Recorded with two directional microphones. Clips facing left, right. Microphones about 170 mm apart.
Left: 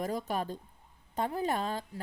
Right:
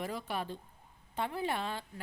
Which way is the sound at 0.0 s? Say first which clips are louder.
Left 4 dB; 40° left (ahead or behind).